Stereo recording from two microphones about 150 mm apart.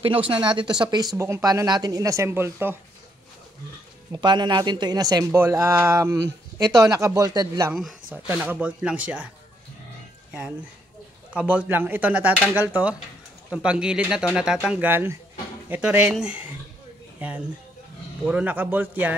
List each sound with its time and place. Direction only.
0.0 s speech: 35° right (ahead or behind); by 2.8 s 15° right (ahead or behind)
4.1 s speech: 30° right (ahead or behind)
8.3 s speech: 10° right (ahead or behind)
11.3 s speech: 10° right (ahead or behind)